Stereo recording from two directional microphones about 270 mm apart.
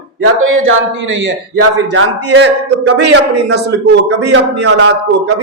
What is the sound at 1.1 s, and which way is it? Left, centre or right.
A man's voice, right.